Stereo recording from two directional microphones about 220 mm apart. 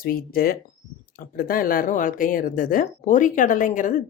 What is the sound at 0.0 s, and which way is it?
Speech, 40° left (ahead or behind).